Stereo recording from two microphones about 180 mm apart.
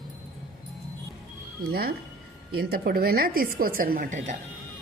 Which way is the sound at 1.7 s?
60° right (ahead or behind).